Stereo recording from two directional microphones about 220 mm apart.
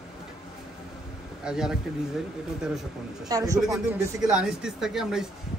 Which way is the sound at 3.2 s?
15° right (ahead or behind).